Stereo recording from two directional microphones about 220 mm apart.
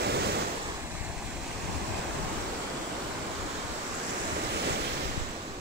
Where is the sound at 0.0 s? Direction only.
50° right (ahead or behind).